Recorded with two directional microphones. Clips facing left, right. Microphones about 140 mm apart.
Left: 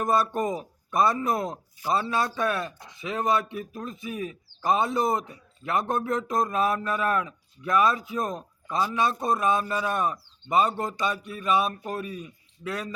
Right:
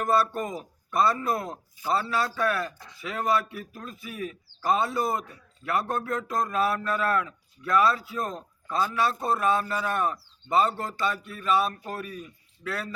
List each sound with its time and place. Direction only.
0.0 s a man's voice: 15° left (ahead or behind)